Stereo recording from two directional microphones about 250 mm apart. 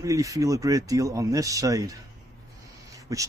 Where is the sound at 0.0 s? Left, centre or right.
Centre.